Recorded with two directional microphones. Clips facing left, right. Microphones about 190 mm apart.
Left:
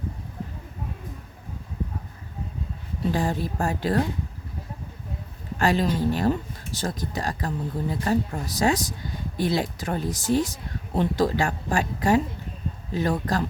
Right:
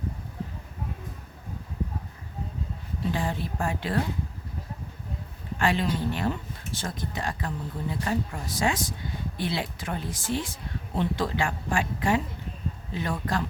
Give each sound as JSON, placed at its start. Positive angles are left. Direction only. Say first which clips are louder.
{"t": 3.1, "sound": "speech", "louder": "left 4 dB", "side_deg": 40}
{"t": 5.5, "sound": "speech", "louder": "left 4 dB", "side_deg": 40}